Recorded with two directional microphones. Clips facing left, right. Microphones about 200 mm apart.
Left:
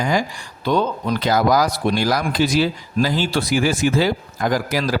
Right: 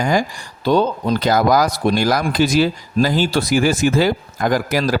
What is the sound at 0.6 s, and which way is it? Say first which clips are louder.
A man's voice: right 3 dB; 35° right (ahead or behind).